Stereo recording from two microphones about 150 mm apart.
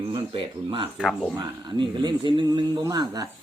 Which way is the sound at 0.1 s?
35° right (ahead or behind).